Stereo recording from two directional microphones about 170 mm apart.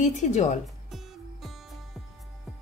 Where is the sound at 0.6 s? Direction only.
Centre (ahead or behind).